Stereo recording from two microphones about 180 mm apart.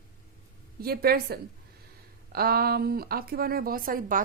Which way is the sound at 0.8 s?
60° right (ahead or behind).